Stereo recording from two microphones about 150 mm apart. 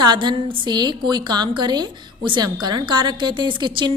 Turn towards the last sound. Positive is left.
turn(degrees=-30)  # may be behind; listen again after turning